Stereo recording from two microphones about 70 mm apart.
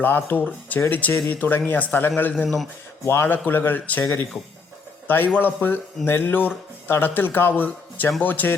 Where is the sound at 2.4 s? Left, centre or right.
Centre.